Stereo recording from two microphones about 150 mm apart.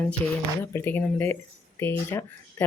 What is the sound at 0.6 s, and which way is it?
Speech, 15° left (ahead or behind).